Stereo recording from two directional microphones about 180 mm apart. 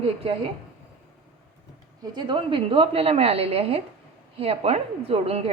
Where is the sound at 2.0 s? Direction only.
25° right (ahead or behind).